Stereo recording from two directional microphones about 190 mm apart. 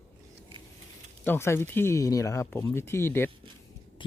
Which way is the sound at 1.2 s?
10° left (ahead or behind).